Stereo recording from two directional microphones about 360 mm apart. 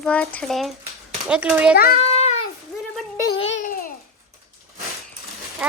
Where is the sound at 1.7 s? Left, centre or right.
Left.